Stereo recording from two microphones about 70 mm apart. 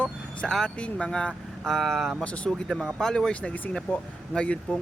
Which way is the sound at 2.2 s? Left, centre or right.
Centre.